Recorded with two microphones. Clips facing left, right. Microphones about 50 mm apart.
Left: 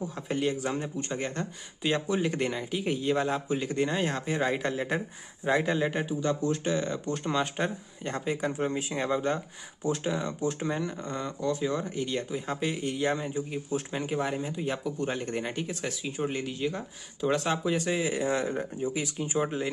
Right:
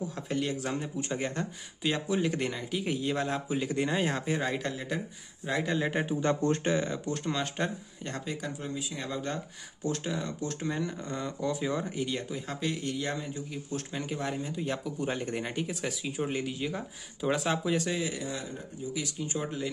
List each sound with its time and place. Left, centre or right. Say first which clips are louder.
0.3 s speech: left 3 dB; centre
4.5 s a man's voice: left 4 dB; centre
5.5 s speech: left 4 dB; centre
5.8 s speech: left 1 dB; centre
7.2 s speech: left 4 dB; centre
8.3 s a man's voice: left 8 dB; left
8.5 s speech: left 7 dB; left
9.1 s speech: left 7 dB; centre
10.8 s speech: left 1 dB; centre
18.1 s speech: left 9 dB; left
19.2 s a man's voice: left 6 dB; left